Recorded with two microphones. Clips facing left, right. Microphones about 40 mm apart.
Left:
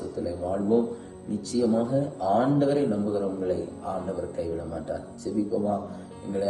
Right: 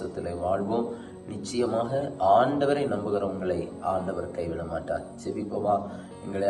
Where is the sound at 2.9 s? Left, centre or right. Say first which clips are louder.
Left 1 dB; right.